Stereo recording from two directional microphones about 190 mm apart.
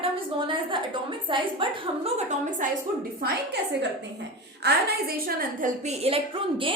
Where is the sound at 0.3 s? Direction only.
25° right (ahead or behind).